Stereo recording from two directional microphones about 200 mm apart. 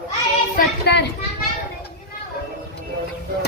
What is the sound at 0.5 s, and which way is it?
Speech, 55° left (ahead or behind).